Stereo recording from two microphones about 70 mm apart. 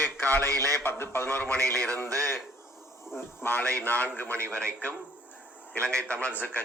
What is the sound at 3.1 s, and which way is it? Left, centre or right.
A man's voice, left.